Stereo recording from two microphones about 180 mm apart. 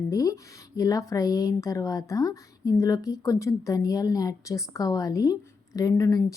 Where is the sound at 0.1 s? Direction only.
20° left (ahead or behind).